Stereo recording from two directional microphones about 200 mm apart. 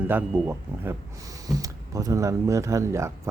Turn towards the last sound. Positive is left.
turn(degrees=-15)  # may be behind; listen again after turning